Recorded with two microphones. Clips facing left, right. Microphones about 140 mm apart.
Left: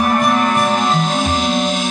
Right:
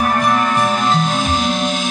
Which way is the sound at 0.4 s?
20° left (ahead or behind).